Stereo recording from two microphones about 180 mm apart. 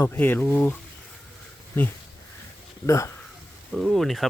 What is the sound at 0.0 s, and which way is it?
Speech, 10° left (ahead or behind).